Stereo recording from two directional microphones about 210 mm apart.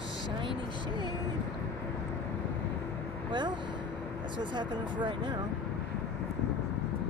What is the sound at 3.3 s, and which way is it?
Speech, 20° right (ahead or behind).